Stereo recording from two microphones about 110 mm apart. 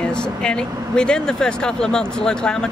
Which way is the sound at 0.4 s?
10° left (ahead or behind).